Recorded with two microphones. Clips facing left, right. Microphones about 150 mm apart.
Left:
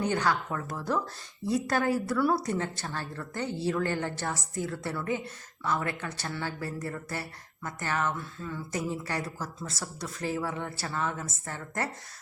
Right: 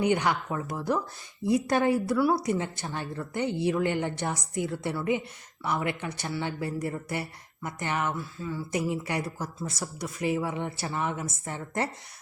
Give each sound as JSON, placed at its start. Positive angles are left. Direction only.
{"t": 0.0, "sound": "a woman's voice", "side_deg": -15}
{"t": 8.7, "sound": "a woman's voice", "side_deg": -15}